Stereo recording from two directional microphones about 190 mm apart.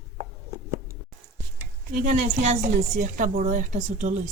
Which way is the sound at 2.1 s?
40° right (ahead or behind).